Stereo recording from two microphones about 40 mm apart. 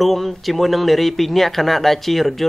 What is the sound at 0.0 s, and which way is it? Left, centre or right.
Speech, centre.